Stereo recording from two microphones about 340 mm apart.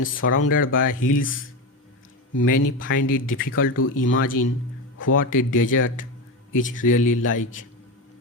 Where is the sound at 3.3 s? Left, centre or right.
Left.